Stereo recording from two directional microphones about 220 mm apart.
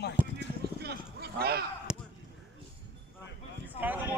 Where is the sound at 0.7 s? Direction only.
45° right (ahead or behind).